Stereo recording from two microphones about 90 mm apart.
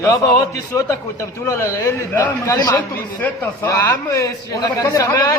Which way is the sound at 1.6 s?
20° left (ahead or behind).